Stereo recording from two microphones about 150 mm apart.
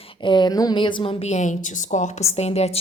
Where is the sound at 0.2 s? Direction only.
30° left (ahead or behind).